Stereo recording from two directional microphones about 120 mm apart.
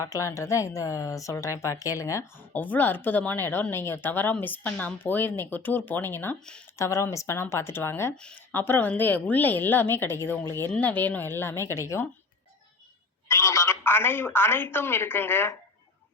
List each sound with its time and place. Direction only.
0.0 s speech: 25° left (ahead or behind)
2.5 s a woman's voice: 15° left (ahead or behind)
8.1 s a woman's voice: 5° left (ahead or behind)
8.5 s a woman's voice: 15° left (ahead or behind)
13.2 s speech: 25° left (ahead or behind)